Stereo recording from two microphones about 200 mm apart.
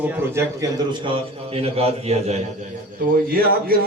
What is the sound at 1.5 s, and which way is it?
Speech, 30° right (ahead or behind).